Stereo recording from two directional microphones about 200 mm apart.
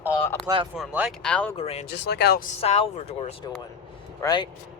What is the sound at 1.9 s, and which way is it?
Speech, 55° left (ahead or behind).